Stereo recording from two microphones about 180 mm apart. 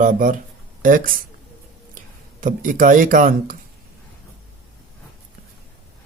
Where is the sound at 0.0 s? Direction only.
50° right (ahead or behind).